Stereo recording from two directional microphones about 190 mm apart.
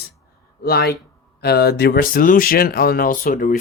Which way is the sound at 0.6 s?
55° left (ahead or behind).